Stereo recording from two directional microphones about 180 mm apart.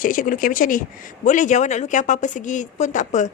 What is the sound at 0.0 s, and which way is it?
Speech, 50° left (ahead or behind).